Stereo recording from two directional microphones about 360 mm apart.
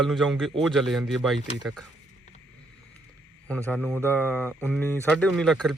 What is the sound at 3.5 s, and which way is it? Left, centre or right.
Speech, centre.